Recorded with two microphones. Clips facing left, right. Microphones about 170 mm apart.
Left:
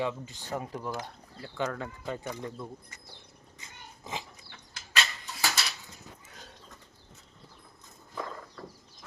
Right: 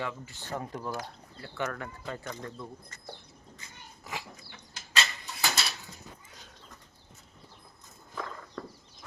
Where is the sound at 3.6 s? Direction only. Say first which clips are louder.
Left 6 dB; 20° left (ahead or behind).